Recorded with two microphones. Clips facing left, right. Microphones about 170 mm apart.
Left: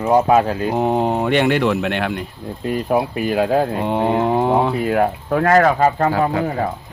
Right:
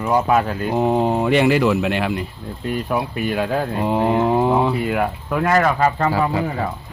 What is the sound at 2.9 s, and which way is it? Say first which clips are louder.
Speech: left 5 dB; 40° left (ahead or behind).